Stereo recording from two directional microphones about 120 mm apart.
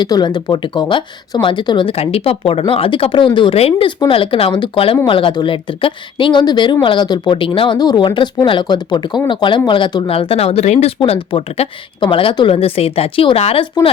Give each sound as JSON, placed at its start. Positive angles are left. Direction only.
{"t": 0.0, "sound": "speech", "side_deg": 35}
{"t": 12.5, "sound": "speech", "side_deg": 55}